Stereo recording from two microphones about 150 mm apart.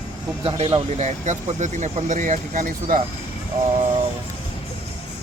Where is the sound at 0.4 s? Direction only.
35° right (ahead or behind); by 3.0 s 60° right (ahead or behind).